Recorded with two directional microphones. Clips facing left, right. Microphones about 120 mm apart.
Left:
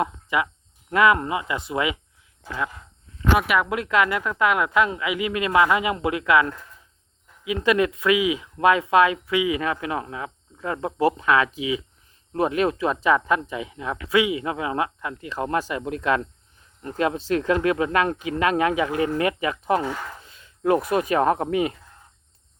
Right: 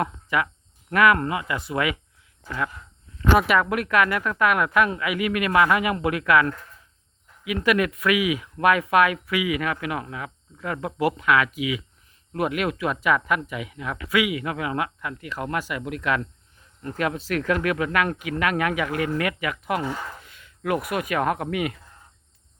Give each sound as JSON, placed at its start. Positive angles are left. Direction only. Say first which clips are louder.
{"t": 0.0, "sound": "speech", "louder": "left 1 dB", "side_deg": 20}
{"t": 3.3, "sound": "speech", "louder": "right 2 dB", "side_deg": 5}
{"t": 3.6, "sound": "speech", "louder": "even", "side_deg": 20}